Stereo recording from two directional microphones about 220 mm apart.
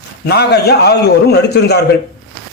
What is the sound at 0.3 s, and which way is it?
A man's voice, 45° left (ahead or behind).